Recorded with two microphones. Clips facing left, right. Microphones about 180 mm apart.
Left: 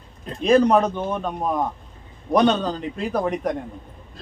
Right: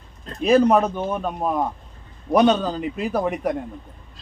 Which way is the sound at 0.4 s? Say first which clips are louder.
Even; 5° right (ahead or behind).